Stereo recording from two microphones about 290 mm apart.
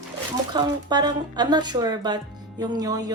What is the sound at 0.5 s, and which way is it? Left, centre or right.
Speech, centre.